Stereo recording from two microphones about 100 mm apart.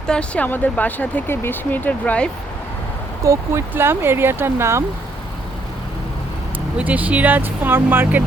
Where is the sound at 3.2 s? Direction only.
30° right (ahead or behind).